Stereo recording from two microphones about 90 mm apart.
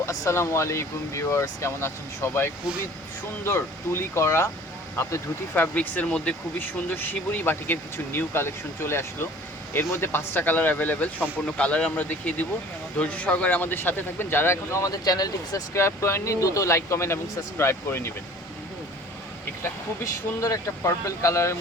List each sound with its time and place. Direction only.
0.0 s speech: 30° left (ahead or behind); by 6.3 s 10° left (ahead or behind)
6.6 s speech: 20° left (ahead or behind); by 15.6 s 45° left (ahead or behind)
15.7 s speech: 30° left (ahead or behind)
20.4 s speech: 35° left (ahead or behind)